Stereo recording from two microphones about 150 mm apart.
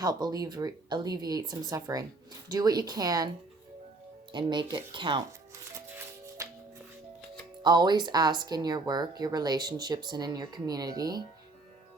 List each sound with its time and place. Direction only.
0.0 s speech: 25° right (ahead or behind)
4.3 s speech: 30° right (ahead or behind)
5.9 s music: 20° right (ahead or behind)
7.6 s speech: 30° right (ahead or behind)